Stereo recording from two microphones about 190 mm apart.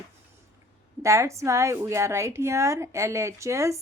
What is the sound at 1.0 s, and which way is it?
A woman's voice, 15° right (ahead or behind).